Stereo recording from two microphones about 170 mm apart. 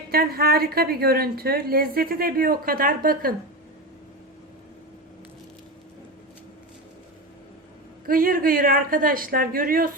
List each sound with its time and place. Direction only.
0.1 s a woman's voice: 65° right (ahead or behind)
8.0 s a woman's voice: 55° right (ahead or behind)